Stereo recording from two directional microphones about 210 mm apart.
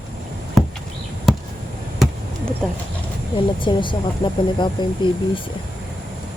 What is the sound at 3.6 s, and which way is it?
Speech, 25° left (ahead or behind).